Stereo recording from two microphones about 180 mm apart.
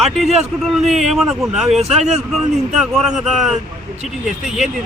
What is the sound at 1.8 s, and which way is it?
Speech, 35° right (ahead or behind).